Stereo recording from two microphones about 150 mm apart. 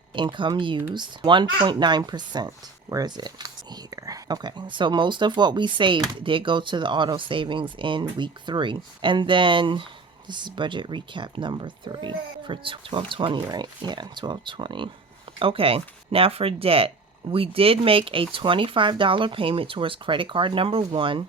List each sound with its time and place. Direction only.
0.1 s speech: 30° right (ahead or behind)